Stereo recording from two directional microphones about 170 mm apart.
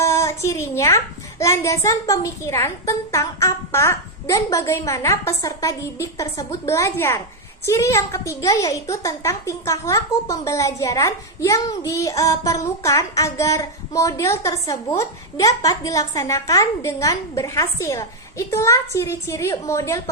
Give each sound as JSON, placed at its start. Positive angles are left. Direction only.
{"t": 0.0, "sound": "a child's voice", "side_deg": 15}